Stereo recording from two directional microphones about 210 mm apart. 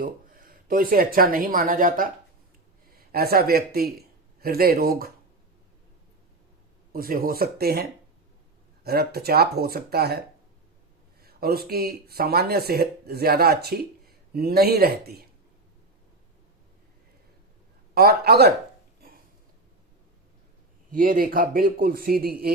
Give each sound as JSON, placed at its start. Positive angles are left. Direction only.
{"t": 0.0, "sound": "speech", "side_deg": -40}
{"t": 6.9, "sound": "speech", "side_deg": -45}
{"t": 11.2, "sound": "speech", "side_deg": -45}
{"t": 17.9, "sound": "speech", "side_deg": -50}
{"t": 20.9, "sound": "speech", "side_deg": -40}